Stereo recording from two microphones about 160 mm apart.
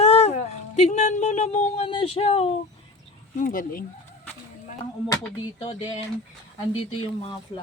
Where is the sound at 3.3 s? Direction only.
55° left (ahead or behind).